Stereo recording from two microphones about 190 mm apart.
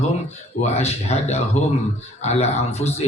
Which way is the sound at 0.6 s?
35° left (ahead or behind).